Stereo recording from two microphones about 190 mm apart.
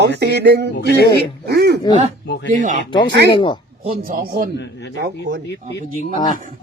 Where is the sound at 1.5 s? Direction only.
60° right (ahead or behind).